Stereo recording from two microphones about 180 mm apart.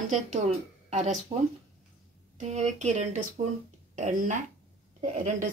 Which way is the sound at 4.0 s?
45° right (ahead or behind).